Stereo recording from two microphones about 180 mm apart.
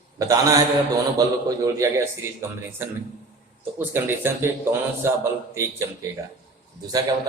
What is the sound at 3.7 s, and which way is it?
Speech, 10° right (ahead or behind).